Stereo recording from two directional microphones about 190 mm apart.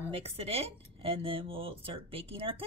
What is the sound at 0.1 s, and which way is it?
Speech, 30° right (ahead or behind).